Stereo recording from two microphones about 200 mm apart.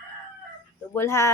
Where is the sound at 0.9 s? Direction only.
15° left (ahead or behind).